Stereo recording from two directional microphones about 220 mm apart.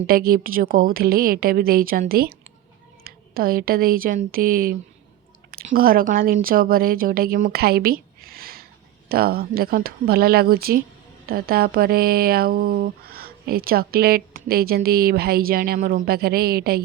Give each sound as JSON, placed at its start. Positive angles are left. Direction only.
{"t": 0.1, "sound": "a woman's voice", "side_deg": -40}